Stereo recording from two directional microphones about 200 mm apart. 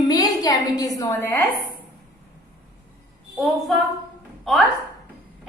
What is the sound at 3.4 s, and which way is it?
Speech, centre (ahead or behind).